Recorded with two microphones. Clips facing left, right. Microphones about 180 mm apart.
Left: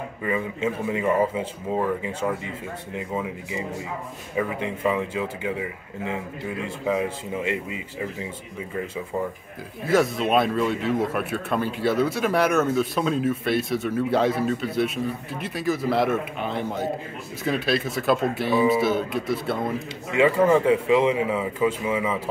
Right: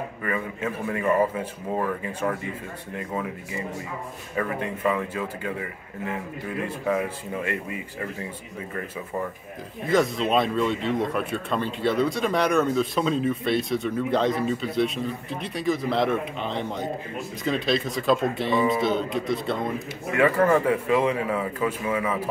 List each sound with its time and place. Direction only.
0.2 s speech: 20° left (ahead or behind)
9.8 s speech: 5° left (ahead or behind)
20.1 s speech: 20° left (ahead or behind)